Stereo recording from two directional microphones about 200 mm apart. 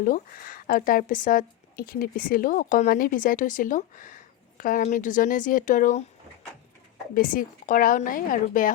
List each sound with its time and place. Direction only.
0.0 s speech: 45° left (ahead or behind)
7.1 s speech: 45° left (ahead or behind)